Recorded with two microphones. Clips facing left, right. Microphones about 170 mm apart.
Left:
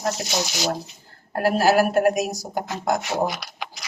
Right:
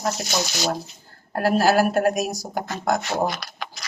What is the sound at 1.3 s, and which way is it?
Speech, 20° left (ahead or behind).